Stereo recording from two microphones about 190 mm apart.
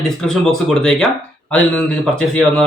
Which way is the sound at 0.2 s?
5° left (ahead or behind).